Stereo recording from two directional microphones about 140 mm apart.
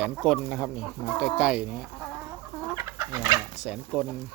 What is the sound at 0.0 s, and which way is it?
Speech, 5° right (ahead or behind).